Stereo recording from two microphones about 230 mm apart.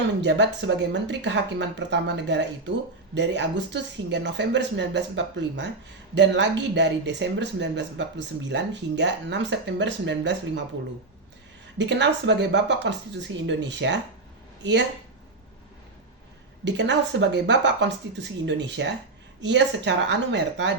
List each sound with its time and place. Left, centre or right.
0.2 s speech: right
11.8 s speech: right
16.6 s speech: right